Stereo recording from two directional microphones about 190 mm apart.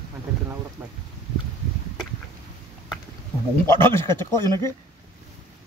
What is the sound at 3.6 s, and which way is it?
Speech, 10° left (ahead or behind).